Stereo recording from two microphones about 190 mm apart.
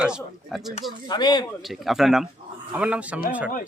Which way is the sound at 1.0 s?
20° left (ahead or behind).